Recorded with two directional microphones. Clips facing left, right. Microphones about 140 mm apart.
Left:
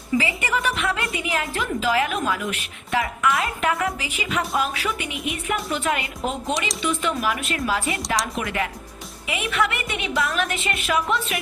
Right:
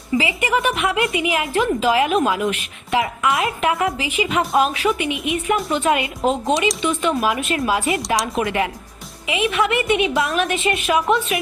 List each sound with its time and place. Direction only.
0.2 s a woman's voice: 20° right (ahead or behind)